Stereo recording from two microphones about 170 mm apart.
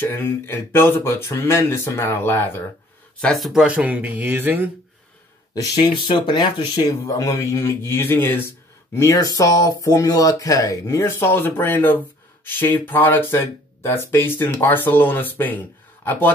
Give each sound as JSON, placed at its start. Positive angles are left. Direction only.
{"t": 0.0, "sound": "speech", "side_deg": 10}
{"t": 5.5, "sound": "speech", "side_deg": 25}